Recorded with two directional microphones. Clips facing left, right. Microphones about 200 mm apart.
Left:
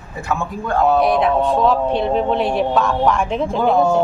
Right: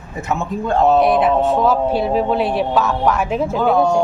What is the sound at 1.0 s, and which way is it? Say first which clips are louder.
Speech: right 1 dB; centre (ahead or behind).